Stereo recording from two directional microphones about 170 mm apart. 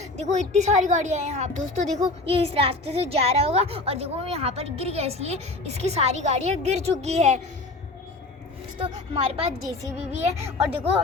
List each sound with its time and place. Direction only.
0.2 s a woman's voice: 40° right (ahead or behind)
8.8 s a woman's voice: 35° right (ahead or behind)